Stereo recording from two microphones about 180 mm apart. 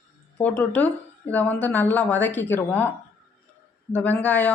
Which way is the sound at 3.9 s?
10° left (ahead or behind).